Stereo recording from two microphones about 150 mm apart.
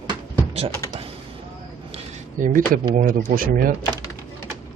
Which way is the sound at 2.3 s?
60° right (ahead or behind).